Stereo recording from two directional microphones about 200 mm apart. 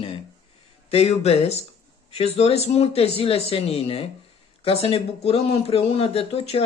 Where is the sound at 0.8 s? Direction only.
30° left (ahead or behind).